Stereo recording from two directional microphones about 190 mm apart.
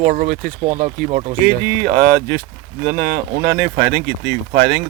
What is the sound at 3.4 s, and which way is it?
Speech, 60° right (ahead or behind).